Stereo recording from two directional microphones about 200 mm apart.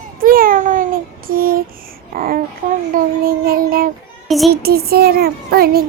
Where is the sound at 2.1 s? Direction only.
45° right (ahead or behind).